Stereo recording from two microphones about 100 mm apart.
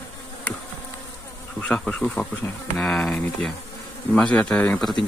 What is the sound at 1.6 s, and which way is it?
Speech, 10° left (ahead or behind).